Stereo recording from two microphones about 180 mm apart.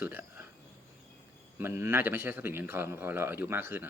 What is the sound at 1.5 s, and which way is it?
Speech, 15° right (ahead or behind).